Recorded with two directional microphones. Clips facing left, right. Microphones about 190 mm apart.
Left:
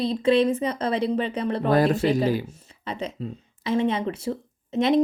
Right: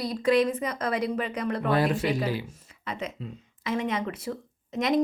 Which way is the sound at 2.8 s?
30° left (ahead or behind).